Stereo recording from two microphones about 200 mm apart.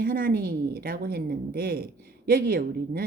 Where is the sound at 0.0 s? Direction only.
45° right (ahead or behind).